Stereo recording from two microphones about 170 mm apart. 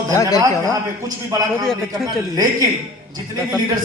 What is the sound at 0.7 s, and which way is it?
A man's voice, 20° right (ahead or behind).